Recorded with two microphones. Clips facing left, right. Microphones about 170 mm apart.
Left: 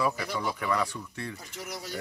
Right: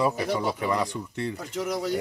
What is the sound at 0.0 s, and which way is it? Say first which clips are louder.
Speech: right 5 dB; 20° right (ahead or behind).